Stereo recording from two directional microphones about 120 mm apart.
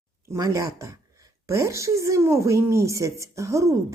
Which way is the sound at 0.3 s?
25° right (ahead or behind).